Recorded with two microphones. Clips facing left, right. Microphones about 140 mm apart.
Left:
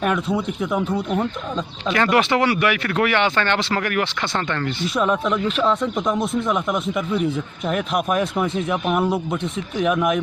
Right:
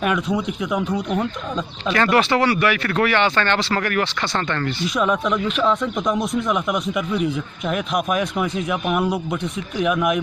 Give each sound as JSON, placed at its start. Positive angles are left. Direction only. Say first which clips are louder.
{"t": 0.8, "sound": "speech", "louder": "even", "side_deg": 5}
{"t": 1.9, "sound": "speech", "louder": "even", "side_deg": 15}
{"t": 4.8, "sound": "speech", "louder": "even", "side_deg": 30}
{"t": 5.1, "sound": "speech", "louder": "even", "side_deg": 0}